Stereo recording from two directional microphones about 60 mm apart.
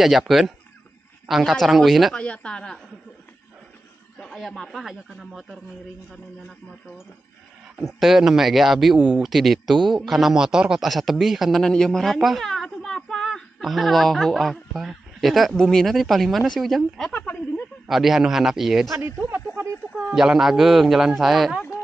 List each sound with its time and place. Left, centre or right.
0.3 s speech: centre
2.1 s speech: centre
4.2 s speech: centre
8.0 s speech: centre
10.9 s speech: centre
11.6 s a woman's voice: centre
18.9 s speech: right
20.2 s speech: centre